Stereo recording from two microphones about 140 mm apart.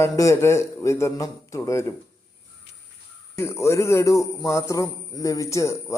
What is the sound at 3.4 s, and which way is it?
A man's voice, 20° left (ahead or behind).